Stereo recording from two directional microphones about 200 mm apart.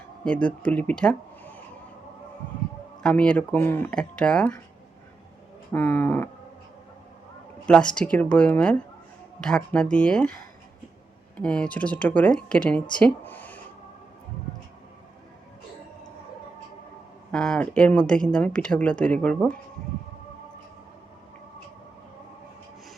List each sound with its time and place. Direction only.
0.3 s speech: 5° left (ahead or behind)
3.0 s speech: 5° left (ahead or behind)
5.7 s speech: 10° left (ahead or behind)
7.7 s speech: 5° left (ahead or behind)
11.3 s speech: 5° left (ahead or behind)
17.3 s speech: 5° left (ahead or behind)